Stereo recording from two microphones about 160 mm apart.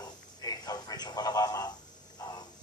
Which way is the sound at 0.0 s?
25° left (ahead or behind).